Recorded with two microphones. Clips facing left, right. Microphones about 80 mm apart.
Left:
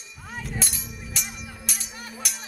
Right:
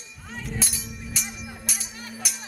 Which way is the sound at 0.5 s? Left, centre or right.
Centre.